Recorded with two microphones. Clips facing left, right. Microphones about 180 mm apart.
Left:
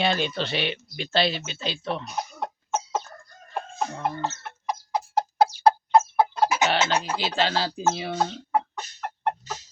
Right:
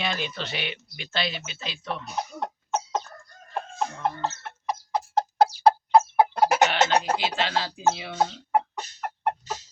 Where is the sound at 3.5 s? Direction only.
10° left (ahead or behind).